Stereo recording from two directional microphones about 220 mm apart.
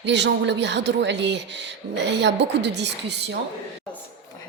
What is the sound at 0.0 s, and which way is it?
Speech, 50° right (ahead or behind).